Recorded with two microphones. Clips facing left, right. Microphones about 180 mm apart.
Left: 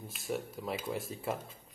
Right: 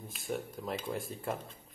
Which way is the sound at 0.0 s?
Centre (ahead or behind).